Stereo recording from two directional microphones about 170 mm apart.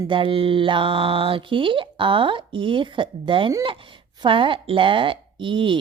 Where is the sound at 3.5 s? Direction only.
30° right (ahead or behind).